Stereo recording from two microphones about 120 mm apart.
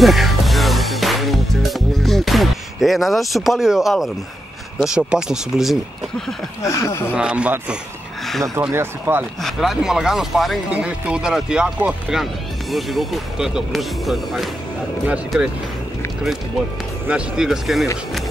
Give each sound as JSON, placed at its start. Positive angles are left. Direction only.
{"t": 0.0, "sound": "music", "side_deg": 0}
{"t": 4.8, "sound": "speech", "side_deg": -5}
{"t": 6.6, "sound": "speech", "side_deg": 25}
{"t": 7.2, "sound": "speech", "side_deg": -10}
{"t": 9.4, "sound": "speech", "side_deg": 0}
{"t": 17.1, "sound": "speech", "side_deg": -5}